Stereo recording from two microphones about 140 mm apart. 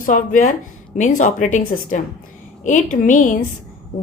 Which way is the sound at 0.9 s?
60° left (ahead or behind).